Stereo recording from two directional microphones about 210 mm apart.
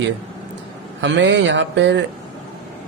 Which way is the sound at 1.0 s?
60° right (ahead or behind).